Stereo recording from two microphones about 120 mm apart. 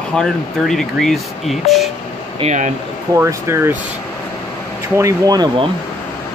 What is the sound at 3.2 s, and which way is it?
Speech, 20° right (ahead or behind).